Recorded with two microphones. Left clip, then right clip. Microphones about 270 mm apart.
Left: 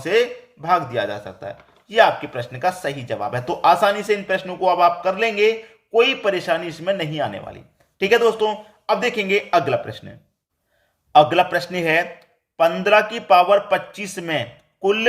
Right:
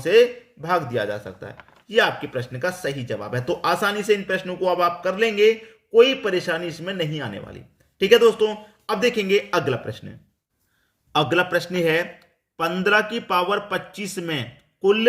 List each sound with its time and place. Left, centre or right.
0.0 s speech: centre
11.1 s speech: centre